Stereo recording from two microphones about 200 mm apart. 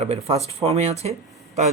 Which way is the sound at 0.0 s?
30° right (ahead or behind).